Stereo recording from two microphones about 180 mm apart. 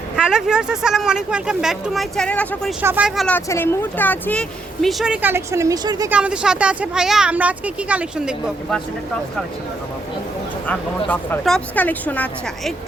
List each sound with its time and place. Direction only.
0.2 s speech: 5° right (ahead or behind)
2.8 s speech: 10° right (ahead or behind)
3.2 s speech: 10° left (ahead or behind); by 6.1 s 20° right (ahead or behind)
6.1 s speech: 5° right (ahead or behind)
10.7 s speech: 10° left (ahead or behind)